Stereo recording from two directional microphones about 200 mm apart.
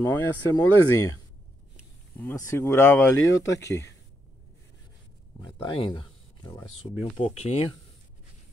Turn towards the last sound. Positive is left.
turn(degrees=30)  # may be behind; listen again after turning